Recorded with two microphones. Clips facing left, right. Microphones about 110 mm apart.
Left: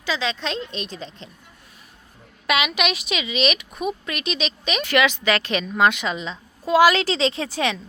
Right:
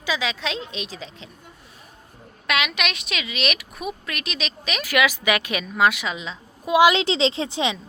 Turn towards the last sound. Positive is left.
turn(degrees=-20)  # may be behind; listen again after turning